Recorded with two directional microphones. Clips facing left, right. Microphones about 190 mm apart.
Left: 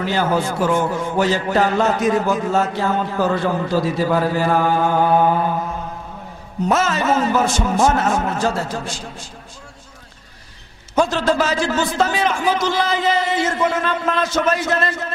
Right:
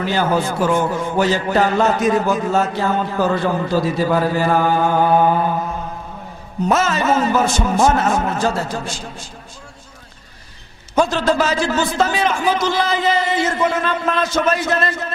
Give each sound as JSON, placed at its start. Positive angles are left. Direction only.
{"t": 0.0, "sound": "a man's voice", "side_deg": -15}
{"t": 1.2, "sound": "a man's voice", "side_deg": -15}
{"t": 6.7, "sound": "a man's voice", "side_deg": -15}
{"t": 11.0, "sound": "a man's voice", "side_deg": -15}